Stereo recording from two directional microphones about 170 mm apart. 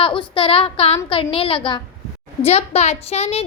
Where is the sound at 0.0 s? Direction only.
30° left (ahead or behind).